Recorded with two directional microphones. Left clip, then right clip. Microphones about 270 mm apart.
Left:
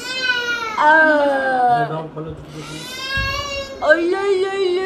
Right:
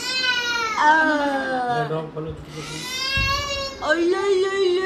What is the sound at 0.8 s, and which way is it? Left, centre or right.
A child's voice, centre.